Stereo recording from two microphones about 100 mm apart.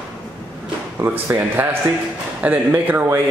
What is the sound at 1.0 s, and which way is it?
A man's voice, 25° right (ahead or behind).